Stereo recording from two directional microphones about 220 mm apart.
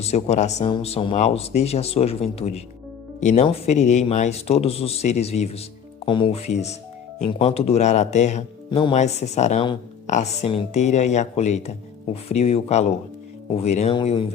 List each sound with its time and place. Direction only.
0.0 s speech: 30° left (ahead or behind)